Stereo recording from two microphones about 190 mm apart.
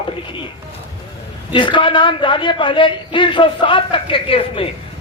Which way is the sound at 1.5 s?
25° left (ahead or behind).